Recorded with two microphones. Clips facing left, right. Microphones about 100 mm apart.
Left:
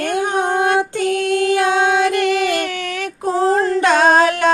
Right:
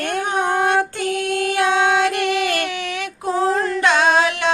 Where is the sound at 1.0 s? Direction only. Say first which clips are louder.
Left 4 dB; 45° left (ahead or behind).